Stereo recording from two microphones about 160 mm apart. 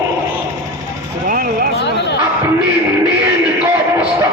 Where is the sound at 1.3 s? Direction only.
65° right (ahead or behind).